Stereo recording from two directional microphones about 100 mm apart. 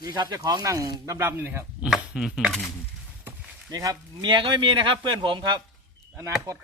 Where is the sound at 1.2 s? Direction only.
20° right (ahead or behind).